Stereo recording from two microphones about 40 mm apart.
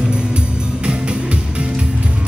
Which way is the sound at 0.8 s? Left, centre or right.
Right.